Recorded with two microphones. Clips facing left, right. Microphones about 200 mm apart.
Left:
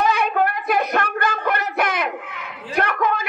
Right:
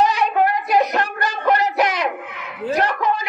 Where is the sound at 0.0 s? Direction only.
55° left (ahead or behind).